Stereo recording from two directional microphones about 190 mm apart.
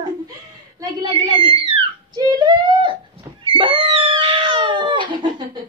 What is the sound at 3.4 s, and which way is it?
Cat, 25° right (ahead or behind).